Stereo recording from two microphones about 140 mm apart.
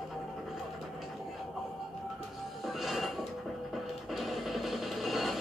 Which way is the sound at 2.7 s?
Centre (ahead or behind).